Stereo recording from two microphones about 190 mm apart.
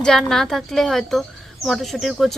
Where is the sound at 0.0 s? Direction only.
5° left (ahead or behind).